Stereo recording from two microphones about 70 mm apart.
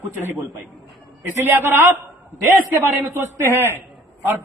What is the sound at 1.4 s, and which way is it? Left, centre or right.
A man's voice, right.